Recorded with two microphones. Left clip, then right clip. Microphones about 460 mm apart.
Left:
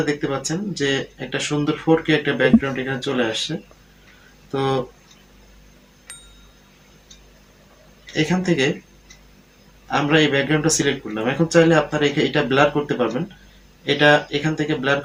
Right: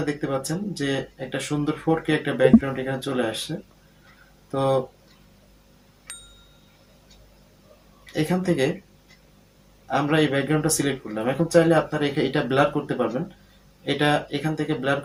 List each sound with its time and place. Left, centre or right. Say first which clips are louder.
0.0 s speech: left 4 dB; right
4.5 s speech: even; right
6.1 s bicycle bell: even; centre
8.1 s speech: left 3 dB; right
9.9 s speech: left 4 dB; right